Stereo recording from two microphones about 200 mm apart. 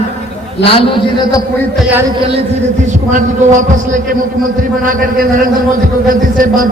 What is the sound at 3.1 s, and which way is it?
A man's voice, 40° right (ahead or behind).